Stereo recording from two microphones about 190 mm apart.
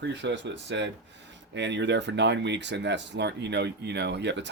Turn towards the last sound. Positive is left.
turn(degrees=-65)  # may be behind; listen again after turning